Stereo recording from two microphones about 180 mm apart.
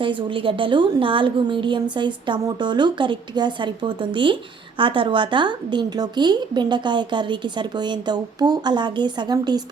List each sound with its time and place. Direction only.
0.0 s a woman's voice: 25° right (ahead or behind)